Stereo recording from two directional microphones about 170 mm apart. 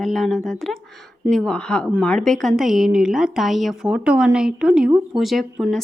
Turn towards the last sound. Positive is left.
turn(degrees=0)  # may be behind; listen again after turning